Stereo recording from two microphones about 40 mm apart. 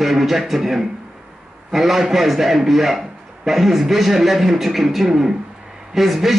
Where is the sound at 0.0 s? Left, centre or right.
Centre.